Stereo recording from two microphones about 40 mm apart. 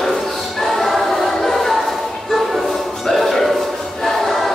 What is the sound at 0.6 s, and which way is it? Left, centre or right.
Choir, centre.